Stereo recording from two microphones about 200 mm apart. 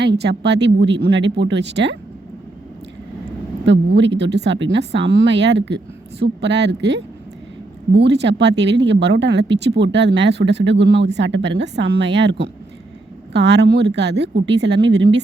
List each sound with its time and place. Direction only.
0.0 s speech: 60° right (ahead or behind)
3.7 s speech: 60° right (ahead or behind)